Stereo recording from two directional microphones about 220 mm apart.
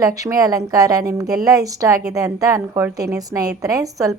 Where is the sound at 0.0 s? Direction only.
15° right (ahead or behind).